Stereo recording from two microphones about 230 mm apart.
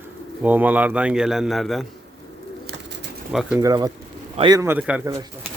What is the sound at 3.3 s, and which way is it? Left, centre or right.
Speech, centre.